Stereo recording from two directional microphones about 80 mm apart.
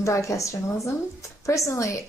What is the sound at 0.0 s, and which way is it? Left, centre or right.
A woman's voice, left.